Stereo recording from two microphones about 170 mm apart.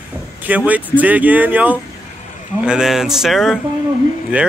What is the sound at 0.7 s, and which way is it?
A man's voice, 10° right (ahead or behind).